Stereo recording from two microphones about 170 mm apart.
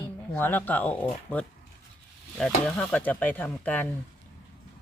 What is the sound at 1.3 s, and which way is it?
Speech, 30° left (ahead or behind).